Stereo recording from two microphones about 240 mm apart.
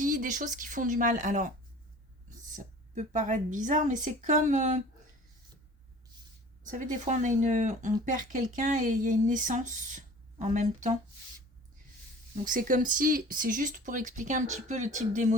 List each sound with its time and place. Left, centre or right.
0.0 s speech: right
6.7 s speech: right
12.5 s speech: right